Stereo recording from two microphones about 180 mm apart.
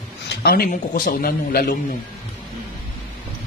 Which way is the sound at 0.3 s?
60° left (ahead or behind).